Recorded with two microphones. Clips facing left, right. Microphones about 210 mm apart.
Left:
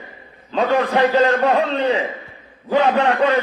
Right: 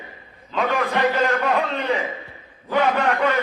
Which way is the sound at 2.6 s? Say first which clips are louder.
Left 4 dB; 30° left (ahead or behind).